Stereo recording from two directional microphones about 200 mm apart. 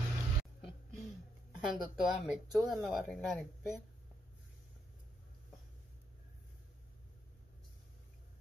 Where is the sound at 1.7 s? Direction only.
Centre (ahead or behind).